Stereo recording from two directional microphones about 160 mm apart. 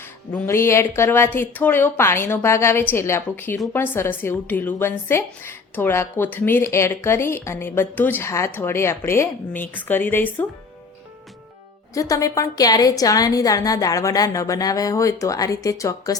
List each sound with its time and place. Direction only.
0.4 s a woman's voice: 15° left (ahead or behind)
11.9 s a woman's voice: 20° left (ahead or behind)